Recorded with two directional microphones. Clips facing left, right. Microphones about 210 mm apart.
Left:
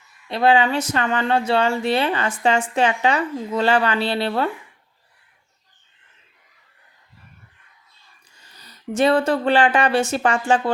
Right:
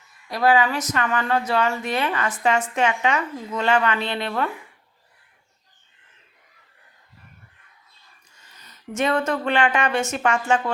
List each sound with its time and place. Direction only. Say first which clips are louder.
0.3 s a woman's voice: left 2 dB; 25° left (ahead or behind)
8.5 s a woman's voice: left 5 dB; 35° left (ahead or behind)